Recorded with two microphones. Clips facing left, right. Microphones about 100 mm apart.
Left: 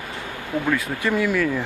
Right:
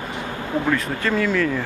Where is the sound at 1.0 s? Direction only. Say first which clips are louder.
Even; 10° left (ahead or behind).